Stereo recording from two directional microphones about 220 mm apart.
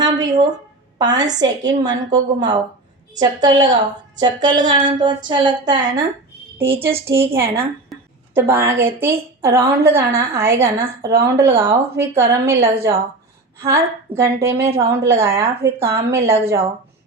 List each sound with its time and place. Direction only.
0.0 s a sound: 20° right (ahead or behind)
0.9 s a woman's voice: 20° right (ahead or behind)
7.1 s a woman's voice: 10° right (ahead or behind)